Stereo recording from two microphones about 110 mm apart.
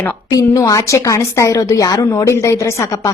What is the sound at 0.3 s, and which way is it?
A woman's voice, 30° left (ahead or behind).